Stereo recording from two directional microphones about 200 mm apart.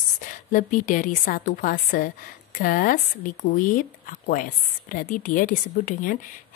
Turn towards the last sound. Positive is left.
turn(degrees=40)  # may be behind; listen again after turning